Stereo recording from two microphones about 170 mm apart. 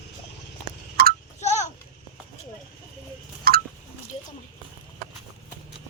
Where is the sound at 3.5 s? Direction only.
60° right (ahead or behind).